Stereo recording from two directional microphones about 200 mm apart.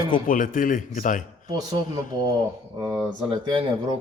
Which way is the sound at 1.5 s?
20° right (ahead or behind).